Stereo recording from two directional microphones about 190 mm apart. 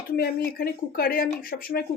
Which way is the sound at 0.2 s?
50° left (ahead or behind).